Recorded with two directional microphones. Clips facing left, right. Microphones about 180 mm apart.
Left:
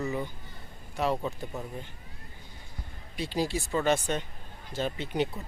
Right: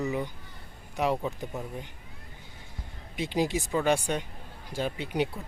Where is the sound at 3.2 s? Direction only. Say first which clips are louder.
Right 2 dB; 20° right (ahead or behind).